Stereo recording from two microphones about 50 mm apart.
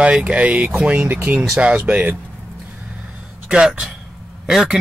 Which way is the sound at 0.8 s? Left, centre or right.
Right.